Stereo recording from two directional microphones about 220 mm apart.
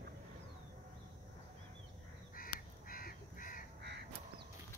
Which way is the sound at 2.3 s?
40° left (ahead or behind).